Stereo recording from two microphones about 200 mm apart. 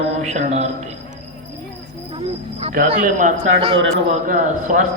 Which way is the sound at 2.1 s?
30° right (ahead or behind).